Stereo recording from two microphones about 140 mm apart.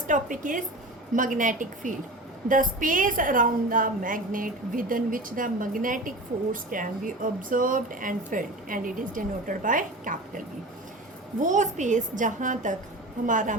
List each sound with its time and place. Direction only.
0.1 s a woman's voice: 70° right (ahead or behind)